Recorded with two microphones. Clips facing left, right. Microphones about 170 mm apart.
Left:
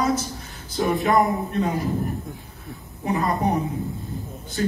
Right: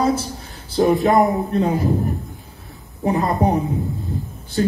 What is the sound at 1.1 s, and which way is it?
Speech, 25° right (ahead or behind).